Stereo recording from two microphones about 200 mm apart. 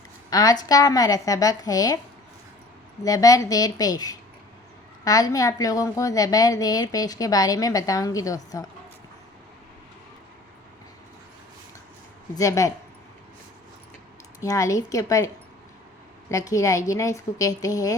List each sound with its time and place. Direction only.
0.3 s a woman's voice: 20° left (ahead or behind)
3.0 s a woman's voice: 15° left (ahead or behind)
12.3 s a woman's voice: 15° left (ahead or behind)
14.4 s a woman's voice: 15° left (ahead or behind)
16.3 s a woman's voice: 15° left (ahead or behind)